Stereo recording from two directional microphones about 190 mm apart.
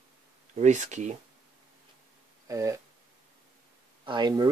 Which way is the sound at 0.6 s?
40° right (ahead or behind).